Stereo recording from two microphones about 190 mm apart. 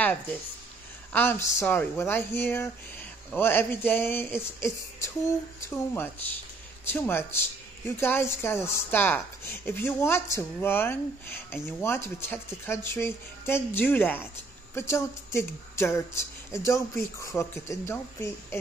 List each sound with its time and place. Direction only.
0.0 s a woman's voice: 10° left (ahead or behind)